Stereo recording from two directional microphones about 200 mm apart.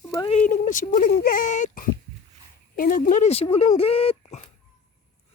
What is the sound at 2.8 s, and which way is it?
Speech, 45° left (ahead or behind).